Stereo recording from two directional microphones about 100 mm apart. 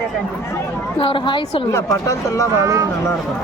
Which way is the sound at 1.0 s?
55° left (ahead or behind).